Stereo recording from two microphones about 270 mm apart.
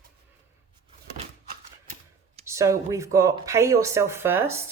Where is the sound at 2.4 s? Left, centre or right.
Centre.